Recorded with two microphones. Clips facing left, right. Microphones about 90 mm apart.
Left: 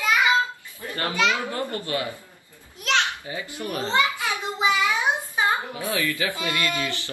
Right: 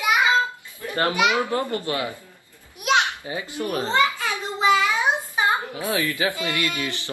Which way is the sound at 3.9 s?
20° left (ahead or behind).